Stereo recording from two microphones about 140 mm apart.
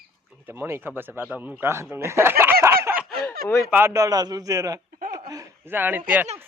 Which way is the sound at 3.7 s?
15° right (ahead or behind).